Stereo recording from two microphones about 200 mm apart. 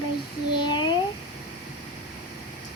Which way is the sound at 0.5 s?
20° left (ahead or behind).